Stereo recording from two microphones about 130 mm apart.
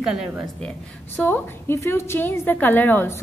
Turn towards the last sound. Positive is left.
turn(degrees=15)  # may be behind; listen again after turning